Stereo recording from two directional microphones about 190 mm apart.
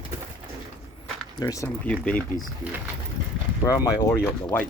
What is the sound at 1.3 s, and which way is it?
Speech, 15° left (ahead or behind).